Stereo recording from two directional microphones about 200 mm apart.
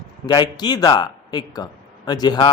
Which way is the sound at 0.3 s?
20° left (ahead or behind).